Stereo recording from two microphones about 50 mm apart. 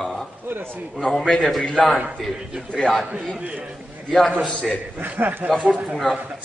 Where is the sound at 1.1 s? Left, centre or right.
Centre.